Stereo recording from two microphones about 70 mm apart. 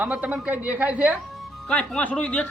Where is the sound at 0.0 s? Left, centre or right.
Centre.